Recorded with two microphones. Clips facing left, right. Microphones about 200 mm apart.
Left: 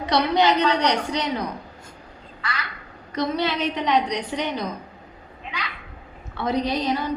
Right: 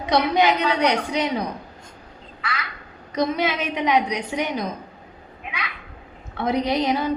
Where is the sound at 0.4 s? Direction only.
10° right (ahead or behind).